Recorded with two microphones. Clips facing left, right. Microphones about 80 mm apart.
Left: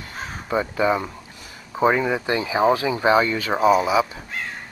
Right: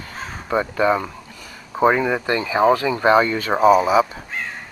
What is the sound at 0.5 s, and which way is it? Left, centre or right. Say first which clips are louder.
Speech: right 2 dB; centre.